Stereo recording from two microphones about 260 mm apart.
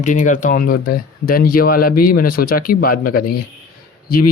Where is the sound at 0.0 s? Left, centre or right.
Left.